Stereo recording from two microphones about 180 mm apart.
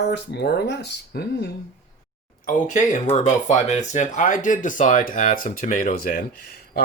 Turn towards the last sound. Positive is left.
turn(degrees=50)  # may be behind; listen again after turning